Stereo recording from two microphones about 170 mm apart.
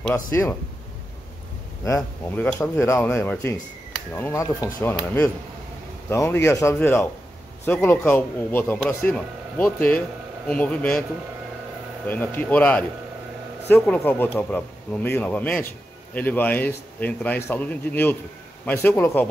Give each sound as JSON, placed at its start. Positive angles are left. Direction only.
{"t": 0.3, "sound": "speech", "side_deg": 15}
{"t": 2.2, "sound": "speech", "side_deg": 10}
{"t": 12.1, "sound": "speech", "side_deg": 10}